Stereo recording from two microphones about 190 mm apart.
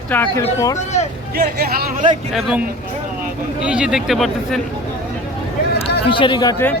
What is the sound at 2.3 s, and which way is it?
Speech, centre (ahead or behind).